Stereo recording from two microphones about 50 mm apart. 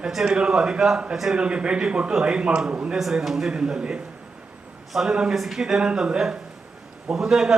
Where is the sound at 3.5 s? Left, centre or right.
Centre.